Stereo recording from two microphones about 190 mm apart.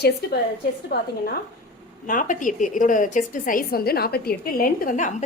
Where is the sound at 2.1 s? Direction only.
45° left (ahead or behind).